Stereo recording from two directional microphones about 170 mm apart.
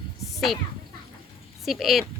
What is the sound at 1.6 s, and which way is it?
Speech, centre (ahead or behind).